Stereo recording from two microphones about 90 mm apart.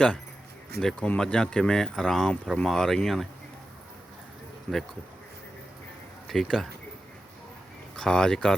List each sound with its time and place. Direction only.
0.8 s speech: 10° left (ahead or behind)
4.7 s speech: 15° left (ahead or behind)
6.2 s speech: 5° left (ahead or behind)
7.9 s speech: 10° left (ahead or behind)